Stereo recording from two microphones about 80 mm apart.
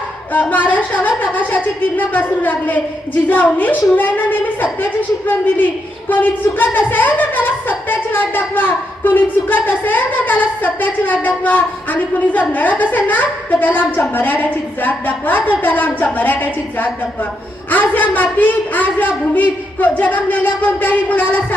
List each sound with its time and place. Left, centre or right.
0.5 s a woman's voice: left